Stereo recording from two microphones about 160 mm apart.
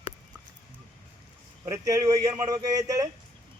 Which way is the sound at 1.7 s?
20° right (ahead or behind).